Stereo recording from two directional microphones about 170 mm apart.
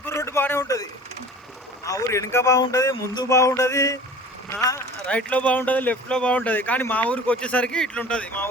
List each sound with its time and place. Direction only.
0.0 s a sound: 15° left (ahead or behind)
1.8 s speech: 20° left (ahead or behind)
5.0 s speech: 10° left (ahead or behind)